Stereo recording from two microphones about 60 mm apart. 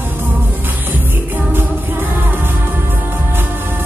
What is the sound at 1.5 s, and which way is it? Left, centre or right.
Music, right.